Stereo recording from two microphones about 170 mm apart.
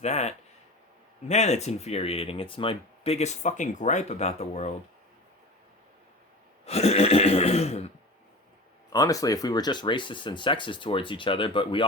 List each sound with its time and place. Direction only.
0.0 s speech: 40° left (ahead or behind)
6.7 s neigh: 40° left (ahead or behind)
8.9 s speech: 20° left (ahead or behind)